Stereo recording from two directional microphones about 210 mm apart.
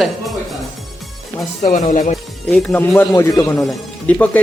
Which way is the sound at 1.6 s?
40° left (ahead or behind).